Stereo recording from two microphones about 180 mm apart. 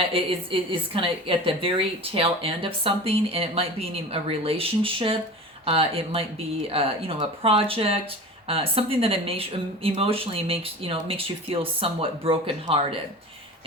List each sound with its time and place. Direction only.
0.1 s speech: 30° right (ahead or behind)